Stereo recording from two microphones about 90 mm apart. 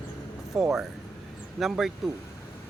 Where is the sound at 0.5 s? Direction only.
10° right (ahead or behind).